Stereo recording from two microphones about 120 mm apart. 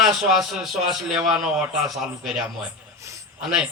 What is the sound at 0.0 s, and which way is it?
A man's voice, centre (ahead or behind).